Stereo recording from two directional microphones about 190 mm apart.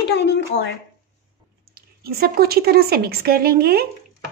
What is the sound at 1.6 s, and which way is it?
Speech, 50° right (ahead or behind).